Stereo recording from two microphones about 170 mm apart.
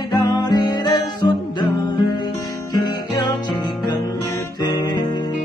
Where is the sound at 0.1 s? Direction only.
25° left (ahead or behind).